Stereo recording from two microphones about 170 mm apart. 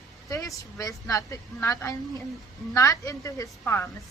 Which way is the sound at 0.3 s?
20° left (ahead or behind).